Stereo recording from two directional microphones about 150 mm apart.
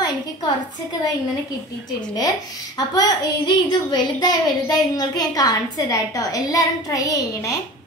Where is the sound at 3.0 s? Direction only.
30° left (ahead or behind).